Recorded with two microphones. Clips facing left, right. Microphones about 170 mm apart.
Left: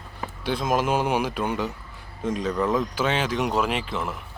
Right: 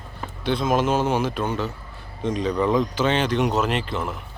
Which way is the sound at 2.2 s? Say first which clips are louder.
Right 2 dB; 5° left (ahead or behind).